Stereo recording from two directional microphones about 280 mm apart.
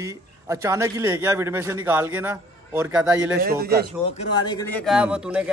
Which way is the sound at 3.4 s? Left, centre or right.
Right.